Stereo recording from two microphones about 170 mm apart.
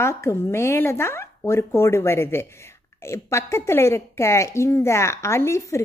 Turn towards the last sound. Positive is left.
turn(degrees=15)  # may be behind; listen again after turning